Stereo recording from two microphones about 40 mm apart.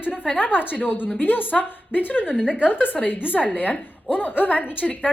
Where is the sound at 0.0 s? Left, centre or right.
Left.